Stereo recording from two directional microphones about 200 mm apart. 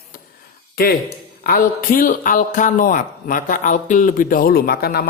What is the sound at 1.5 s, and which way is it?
A man's voice, 45° left (ahead or behind).